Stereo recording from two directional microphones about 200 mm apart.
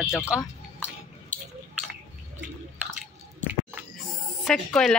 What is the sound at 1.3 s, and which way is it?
Drip, 40° right (ahead or behind).